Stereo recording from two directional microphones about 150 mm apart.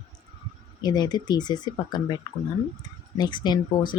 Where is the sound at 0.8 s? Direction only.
25° left (ahead or behind).